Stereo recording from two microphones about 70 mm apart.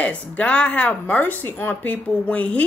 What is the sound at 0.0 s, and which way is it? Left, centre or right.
Speech, centre.